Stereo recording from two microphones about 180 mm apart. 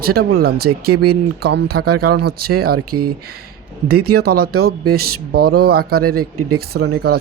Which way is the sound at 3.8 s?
60° right (ahead or behind).